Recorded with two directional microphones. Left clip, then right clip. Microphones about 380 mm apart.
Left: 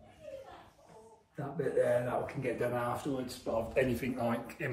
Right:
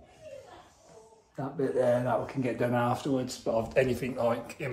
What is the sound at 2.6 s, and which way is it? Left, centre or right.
Speech, right.